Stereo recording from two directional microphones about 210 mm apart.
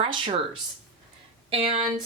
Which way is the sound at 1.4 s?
25° right (ahead or behind).